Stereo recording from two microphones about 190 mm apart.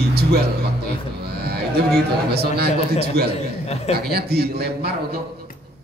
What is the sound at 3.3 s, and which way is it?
Speech, 35° left (ahead or behind).